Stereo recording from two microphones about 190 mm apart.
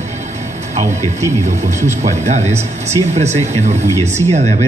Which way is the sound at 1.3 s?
35° right (ahead or behind).